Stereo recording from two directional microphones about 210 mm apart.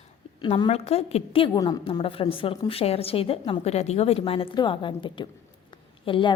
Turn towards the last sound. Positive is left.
turn(degrees=25)  # may be behind; listen again after turning